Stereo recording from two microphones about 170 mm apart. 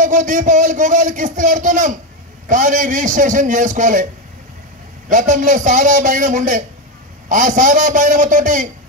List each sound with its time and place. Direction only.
0.0 s a man's voice: 50° right (ahead or behind)
5.1 s a man's voice: 50° right (ahead or behind)